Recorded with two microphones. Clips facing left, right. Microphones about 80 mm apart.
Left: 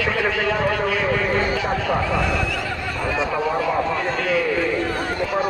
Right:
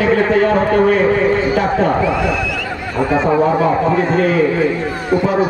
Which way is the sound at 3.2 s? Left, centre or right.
Right.